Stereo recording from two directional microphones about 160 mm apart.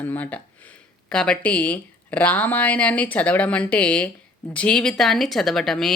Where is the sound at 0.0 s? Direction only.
10° left (ahead or behind).